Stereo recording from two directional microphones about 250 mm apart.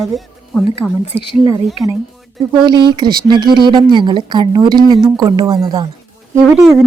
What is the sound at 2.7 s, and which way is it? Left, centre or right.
A woman's voice, centre.